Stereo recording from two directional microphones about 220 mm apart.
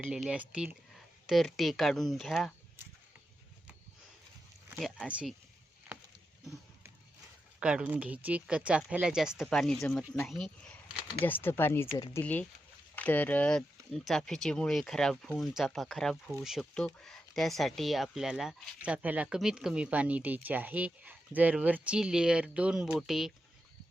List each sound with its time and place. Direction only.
0.1 s speech: 5° right (ahead or behind)
4.7 s speech: 5° right (ahead or behind)
5.9 s a sound: 10° right (ahead or behind)
7.6 s speech: 5° right (ahead or behind); by 12.2 s 20° left (ahead or behind)
12.2 s speech: 5° left (ahead or behind)